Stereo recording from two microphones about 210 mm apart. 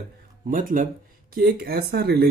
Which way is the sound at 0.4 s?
40° right (ahead or behind).